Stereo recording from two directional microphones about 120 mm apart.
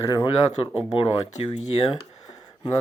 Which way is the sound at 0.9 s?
50° left (ahead or behind).